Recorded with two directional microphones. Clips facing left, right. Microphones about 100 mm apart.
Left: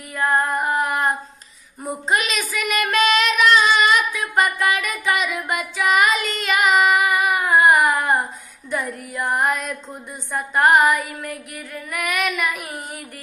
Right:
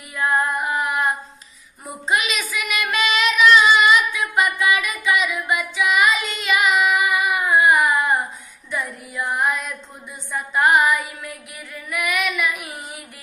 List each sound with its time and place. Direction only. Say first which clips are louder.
0.1 s female singing: left 1 dB; 40° left (ahead or behind)
2.0 s child singing: even; 40° left (ahead or behind)
8.6 s female singing: left 2 dB; 45° left (ahead or behind)
10.3 s child singing: left 2 dB; 45° left (ahead or behind)